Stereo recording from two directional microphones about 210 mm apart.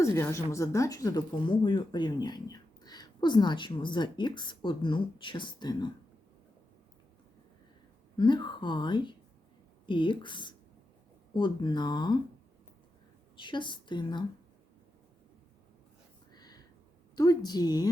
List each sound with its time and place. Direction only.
0.0 s a woman's voice: 15° left (ahead or behind)
8.1 s speech: 20° left (ahead or behind)
13.3 s speech: 25° left (ahead or behind)
16.3 s a sound: 20° left (ahead or behind)
17.2 s speech: 20° left (ahead or behind)